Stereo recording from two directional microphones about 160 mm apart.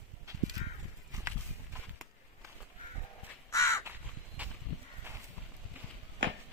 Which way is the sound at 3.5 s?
15° left (ahead or behind).